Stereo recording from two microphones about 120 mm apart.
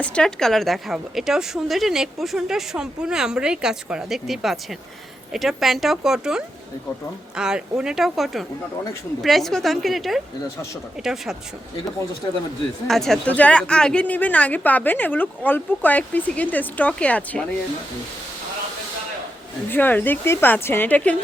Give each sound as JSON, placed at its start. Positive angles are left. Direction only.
{"t": 0.0, "sound": "a woman's voice", "side_deg": 5}
{"t": 12.9, "sound": "a woman's voice", "side_deg": 5}
{"t": 19.7, "sound": "a woman's voice", "side_deg": 15}